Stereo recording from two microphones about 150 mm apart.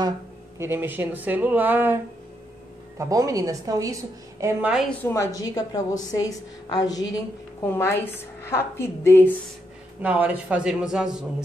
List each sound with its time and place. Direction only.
0.6 s speech: 15° right (ahead or behind)
3.0 s a woman's voice: 20° right (ahead or behind)
5.0 s a woman's voice: 20° left (ahead or behind)
10.0 s speech: 10° right (ahead or behind)